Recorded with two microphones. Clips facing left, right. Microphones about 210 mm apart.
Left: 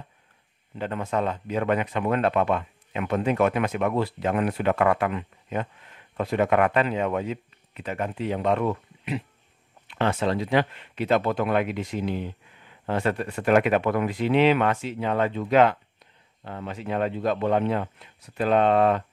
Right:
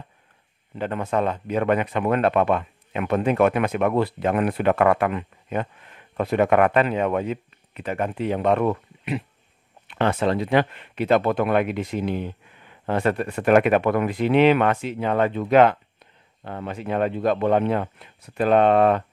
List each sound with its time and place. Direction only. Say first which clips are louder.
0.7 s speech: right 3 dB; 55° right (ahead or behind)